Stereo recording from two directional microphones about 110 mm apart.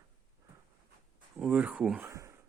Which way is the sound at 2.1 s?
30° right (ahead or behind).